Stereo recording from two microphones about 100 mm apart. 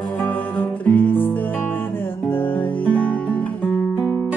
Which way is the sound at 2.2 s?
20° left (ahead or behind).